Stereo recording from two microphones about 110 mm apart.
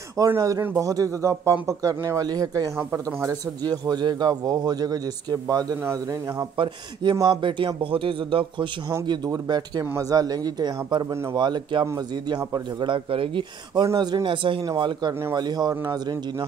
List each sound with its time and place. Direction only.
0.4 s a man's voice: 30° right (ahead or behind)
6.5 s a man's voice: 45° right (ahead or behind)
12.8 s speech: 50° right (ahead or behind)
13.8 s a man's voice: 35° right (ahead or behind)